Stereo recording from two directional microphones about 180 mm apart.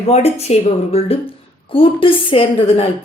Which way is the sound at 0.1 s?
35° left (ahead or behind).